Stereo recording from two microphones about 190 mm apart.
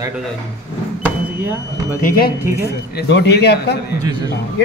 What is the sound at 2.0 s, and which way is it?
Speech, 50° left (ahead or behind).